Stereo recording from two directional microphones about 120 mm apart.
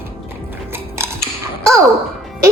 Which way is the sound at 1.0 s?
20° right (ahead or behind).